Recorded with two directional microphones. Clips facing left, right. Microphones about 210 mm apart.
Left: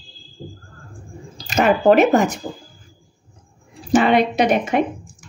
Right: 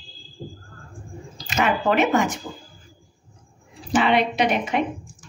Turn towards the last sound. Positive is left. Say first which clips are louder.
# left 5 dB
turn(degrees=45)  # may be behind; listen again after turning